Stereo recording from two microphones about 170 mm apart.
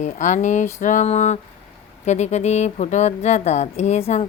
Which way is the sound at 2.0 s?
45° left (ahead or behind).